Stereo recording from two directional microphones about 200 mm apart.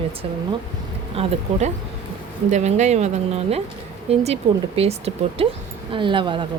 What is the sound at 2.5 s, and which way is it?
Speech, 35° right (ahead or behind).